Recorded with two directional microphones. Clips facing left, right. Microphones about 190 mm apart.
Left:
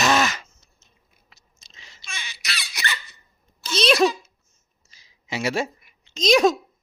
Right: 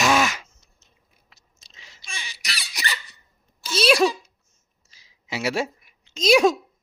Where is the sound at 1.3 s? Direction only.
5° right (ahead or behind).